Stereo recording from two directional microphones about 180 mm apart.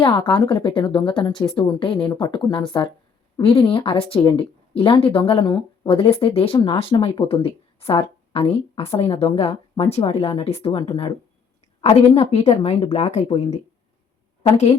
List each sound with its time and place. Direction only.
0.0 s a woman's voice: 25° left (ahead or behind)